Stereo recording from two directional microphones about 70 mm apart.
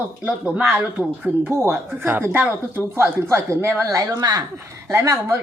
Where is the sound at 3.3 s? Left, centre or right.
Right.